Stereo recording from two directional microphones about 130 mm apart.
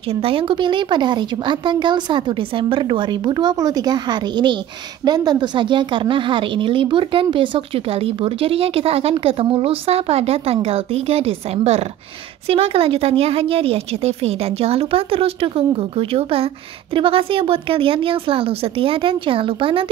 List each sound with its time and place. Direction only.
0.1 s a woman's voice: 45° right (ahead or behind)